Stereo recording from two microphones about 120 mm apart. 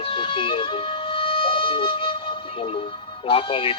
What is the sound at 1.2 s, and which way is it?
Music, 45° left (ahead or behind).